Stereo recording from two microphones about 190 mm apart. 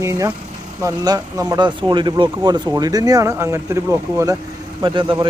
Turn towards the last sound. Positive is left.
turn(degrees=-25)  # may be behind; listen again after turning